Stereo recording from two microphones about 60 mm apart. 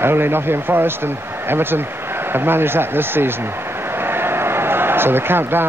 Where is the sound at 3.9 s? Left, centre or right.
Right.